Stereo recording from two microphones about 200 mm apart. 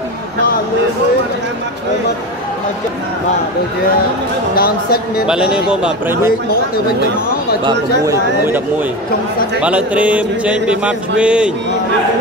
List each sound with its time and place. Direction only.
4.6 s speech: 50° left (ahead or behind)
5.2 s music: 5° right (ahead or behind)
7.6 s speech: 15° right (ahead or behind)
9.6 s music: 5° right (ahead or behind)